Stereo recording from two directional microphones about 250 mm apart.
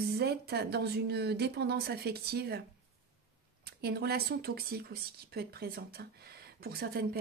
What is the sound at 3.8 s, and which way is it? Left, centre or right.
Speech, right.